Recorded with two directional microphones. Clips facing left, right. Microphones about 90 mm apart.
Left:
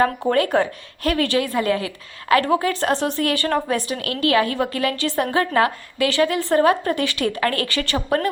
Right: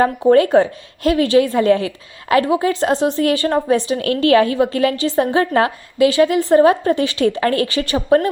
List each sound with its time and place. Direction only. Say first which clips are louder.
0.3 s a woman's voice: right 7 dB; 25° right (ahead or behind)